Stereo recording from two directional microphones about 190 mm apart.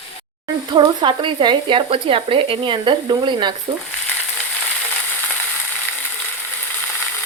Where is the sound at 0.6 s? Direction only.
25° right (ahead or behind).